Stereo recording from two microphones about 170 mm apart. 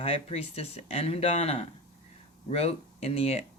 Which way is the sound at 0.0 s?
40° left (ahead or behind).